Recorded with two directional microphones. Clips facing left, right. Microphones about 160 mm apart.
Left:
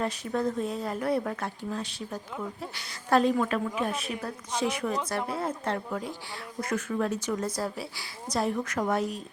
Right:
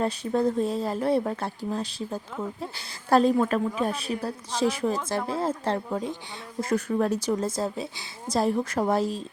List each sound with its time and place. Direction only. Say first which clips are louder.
0.0 s speech: right 4 dB; 30° right (ahead or behind)